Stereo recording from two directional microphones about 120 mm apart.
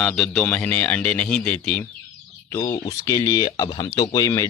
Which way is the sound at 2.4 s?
25° left (ahead or behind).